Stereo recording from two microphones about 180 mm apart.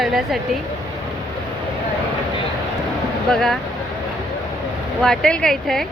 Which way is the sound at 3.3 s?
Centre (ahead or behind).